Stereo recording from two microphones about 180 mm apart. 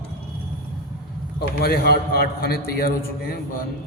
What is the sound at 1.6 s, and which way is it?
A man's voice, 60° left (ahead or behind).